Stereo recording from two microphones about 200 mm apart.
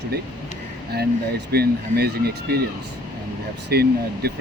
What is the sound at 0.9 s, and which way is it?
Speech, 55° right (ahead or behind).